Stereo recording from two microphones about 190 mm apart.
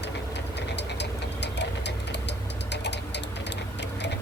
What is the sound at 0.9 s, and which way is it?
Engine, 65° left (ahead or behind).